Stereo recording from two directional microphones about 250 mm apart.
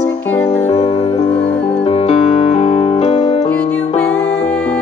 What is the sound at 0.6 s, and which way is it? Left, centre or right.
Music, left.